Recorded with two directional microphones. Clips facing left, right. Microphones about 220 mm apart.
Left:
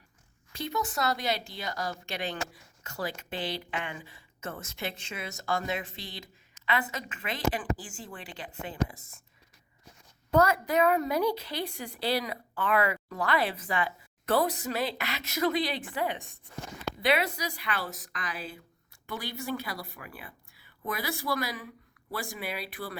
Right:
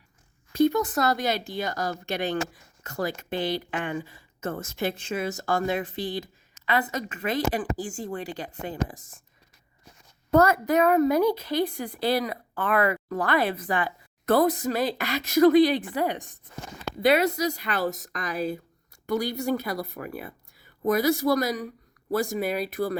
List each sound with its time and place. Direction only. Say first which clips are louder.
0.5 s speech: right 11 dB; 50° right (ahead or behind)
10.3 s speech: right 4 dB; 45° right (ahead or behind)